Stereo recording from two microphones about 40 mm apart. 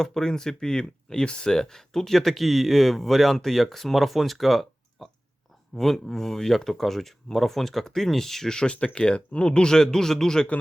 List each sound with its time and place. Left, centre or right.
0.0 s speech: centre
8.5 s speech: left; by 10.4 s centre